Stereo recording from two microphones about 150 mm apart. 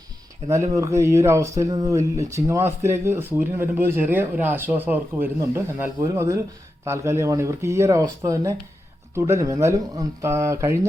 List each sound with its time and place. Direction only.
0.4 s speech: 20° right (ahead or behind)